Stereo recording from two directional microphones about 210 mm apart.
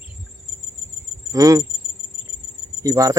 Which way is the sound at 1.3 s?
15° right (ahead or behind).